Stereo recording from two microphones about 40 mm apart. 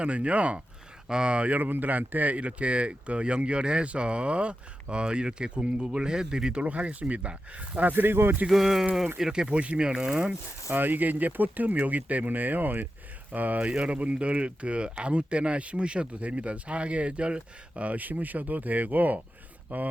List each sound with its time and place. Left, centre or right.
0.0 s speech: right
1.0 s speech: right
1.5 s speech: right
6.7 s speech: right
7.9 s speech: right
8.4 s speech: centre; by 10.2 s right
10.7 s speech: right